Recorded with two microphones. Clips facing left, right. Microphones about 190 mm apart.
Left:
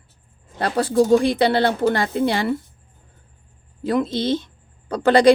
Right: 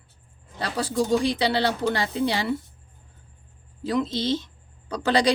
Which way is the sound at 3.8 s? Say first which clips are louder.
Left 4 dB; 55° left (ahead or behind).